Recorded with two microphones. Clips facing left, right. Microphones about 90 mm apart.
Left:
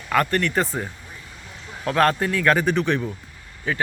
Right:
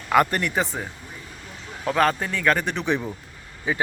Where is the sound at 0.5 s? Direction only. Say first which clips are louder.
Left 2 dB; centre (ahead or behind).